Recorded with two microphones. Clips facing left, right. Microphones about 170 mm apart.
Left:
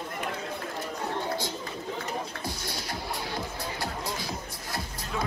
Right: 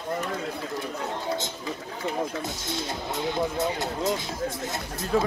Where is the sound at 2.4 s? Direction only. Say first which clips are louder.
Right 4 dB; 20° right (ahead or behind).